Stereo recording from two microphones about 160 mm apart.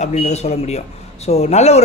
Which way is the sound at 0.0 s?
45° left (ahead or behind).